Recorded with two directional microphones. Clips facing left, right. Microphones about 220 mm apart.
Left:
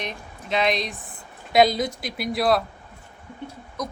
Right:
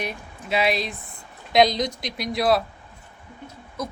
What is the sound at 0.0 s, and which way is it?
Speech, 5° right (ahead or behind).